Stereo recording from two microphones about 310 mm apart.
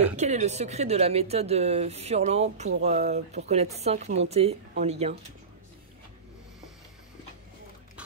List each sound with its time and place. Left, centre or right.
0.2 s speech: right